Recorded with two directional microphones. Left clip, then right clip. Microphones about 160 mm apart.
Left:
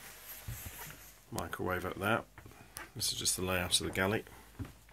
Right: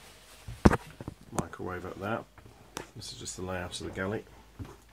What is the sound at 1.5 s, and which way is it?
Speech, 15° left (ahead or behind).